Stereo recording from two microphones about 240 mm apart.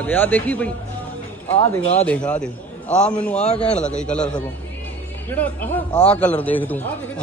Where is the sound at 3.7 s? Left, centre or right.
Centre.